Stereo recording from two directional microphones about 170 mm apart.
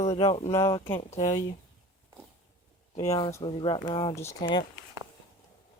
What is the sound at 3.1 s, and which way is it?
Speech, 25° left (ahead or behind).